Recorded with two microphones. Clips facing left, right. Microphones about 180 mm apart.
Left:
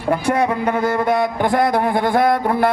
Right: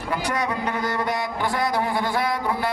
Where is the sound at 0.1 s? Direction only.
55° left (ahead or behind).